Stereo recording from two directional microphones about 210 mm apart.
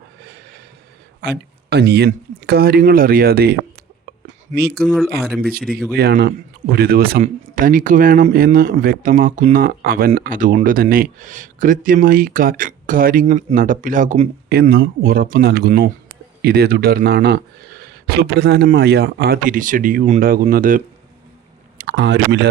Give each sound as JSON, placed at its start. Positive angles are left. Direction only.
{"t": 1.2, "sound": "speech", "side_deg": -50}
{"t": 4.8, "sound": "speech", "side_deg": 0}
{"t": 5.4, "sound": "speech", "side_deg": -45}
{"t": 5.6, "sound": "speech", "side_deg": 0}
{"t": 6.0, "sound": "speech", "side_deg": -50}
{"t": 21.8, "sound": "speech", "side_deg": -55}